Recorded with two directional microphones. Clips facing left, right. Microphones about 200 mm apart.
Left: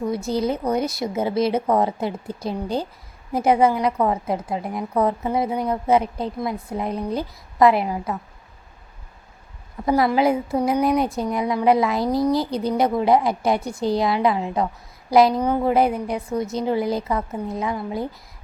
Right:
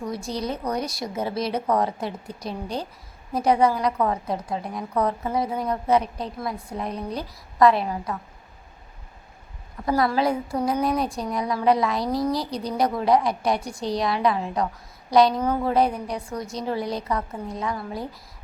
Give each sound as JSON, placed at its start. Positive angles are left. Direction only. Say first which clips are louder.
{"t": 0.0, "sound": "a woman's voice", "louder": "left 6 dB", "side_deg": 25}
{"t": 9.8, "sound": "a woman's voice", "louder": "left 4 dB", "side_deg": 20}
{"t": 12.1, "sound": "a woman's voice", "louder": "left 6 dB", "side_deg": 0}
{"t": 12.4, "sound": "a woman's voice", "louder": "left 4 dB", "side_deg": 25}